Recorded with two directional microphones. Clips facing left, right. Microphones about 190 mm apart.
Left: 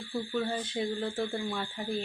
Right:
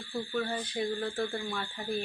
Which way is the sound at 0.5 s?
25° left (ahead or behind).